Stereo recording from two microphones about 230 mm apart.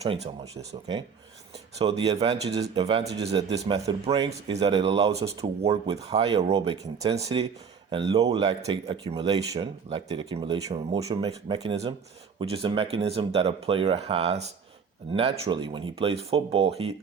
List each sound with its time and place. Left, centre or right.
0.0 s speech: right
3.6 s speech: centre
4.0 s speech: right